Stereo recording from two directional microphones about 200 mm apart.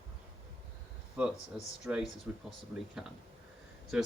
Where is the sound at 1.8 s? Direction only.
5° right (ahead or behind).